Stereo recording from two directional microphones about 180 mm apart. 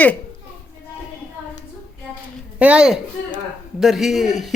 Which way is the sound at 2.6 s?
5° right (ahead or behind).